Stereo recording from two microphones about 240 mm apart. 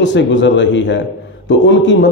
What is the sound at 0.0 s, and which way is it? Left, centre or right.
A man's voice, left.